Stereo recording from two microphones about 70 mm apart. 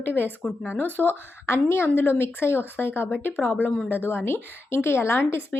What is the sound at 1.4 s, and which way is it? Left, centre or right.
Speech, left.